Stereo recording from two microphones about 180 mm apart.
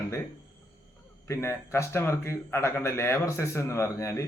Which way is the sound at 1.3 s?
15° left (ahead or behind).